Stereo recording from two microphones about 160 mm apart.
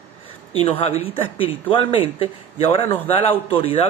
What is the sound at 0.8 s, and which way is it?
A man's voice, 40° left (ahead or behind).